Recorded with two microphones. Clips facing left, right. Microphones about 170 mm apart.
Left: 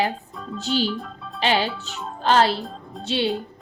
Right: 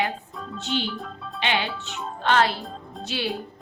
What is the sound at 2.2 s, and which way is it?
Speech, 30° left (ahead or behind).